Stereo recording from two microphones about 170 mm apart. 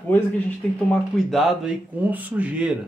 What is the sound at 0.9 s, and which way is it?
Speech, centre (ahead or behind).